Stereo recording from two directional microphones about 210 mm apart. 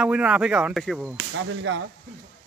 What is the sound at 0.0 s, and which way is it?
Speech, 5° right (ahead or behind).